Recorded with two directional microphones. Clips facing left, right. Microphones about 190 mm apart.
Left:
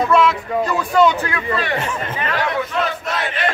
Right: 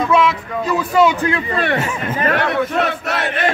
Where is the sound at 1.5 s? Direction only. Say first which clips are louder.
Right 2 dB; 55° right (ahead or behind).